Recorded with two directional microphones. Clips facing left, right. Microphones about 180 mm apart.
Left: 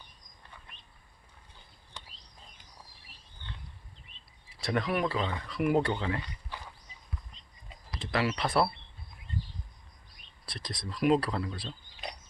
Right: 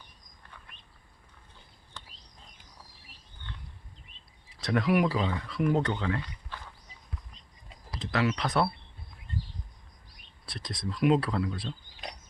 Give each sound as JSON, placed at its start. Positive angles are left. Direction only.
{"t": 2.0, "sound": "a sound", "side_deg": 15}
{"t": 4.6, "sound": "speech", "side_deg": 0}
{"t": 5.5, "sound": "speech", "side_deg": 5}
{"t": 8.0, "sound": "speech", "side_deg": 5}
{"t": 10.5, "sound": "speech", "side_deg": 0}